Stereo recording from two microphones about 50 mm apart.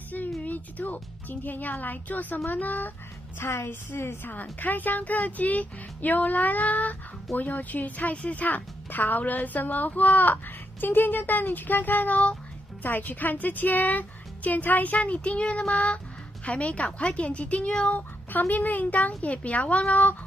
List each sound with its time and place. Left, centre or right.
0.4 s a sound: left
1.3 s speech: left
3.3 s a woman's voice: left
4.3 s a woman's voice: left
18.3 s speech: left